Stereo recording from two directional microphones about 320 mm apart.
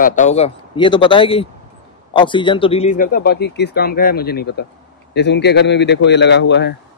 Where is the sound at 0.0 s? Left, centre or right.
Left.